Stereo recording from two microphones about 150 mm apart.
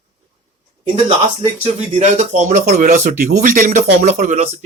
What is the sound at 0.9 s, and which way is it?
Speech, 40° right (ahead or behind).